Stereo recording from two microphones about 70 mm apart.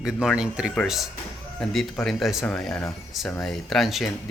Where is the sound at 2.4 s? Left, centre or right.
Centre.